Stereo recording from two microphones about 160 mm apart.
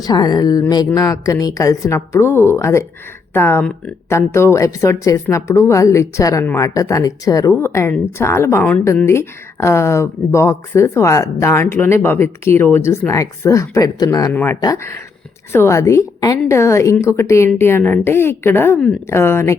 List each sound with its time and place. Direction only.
0.0 s speech: 25° left (ahead or behind)